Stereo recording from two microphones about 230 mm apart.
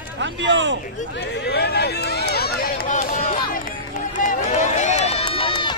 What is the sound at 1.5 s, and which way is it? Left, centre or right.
Run, left.